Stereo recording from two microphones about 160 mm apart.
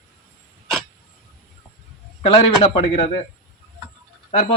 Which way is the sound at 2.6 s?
35° left (ahead or behind).